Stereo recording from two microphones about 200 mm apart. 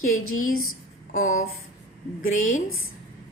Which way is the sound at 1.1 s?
40° left (ahead or behind).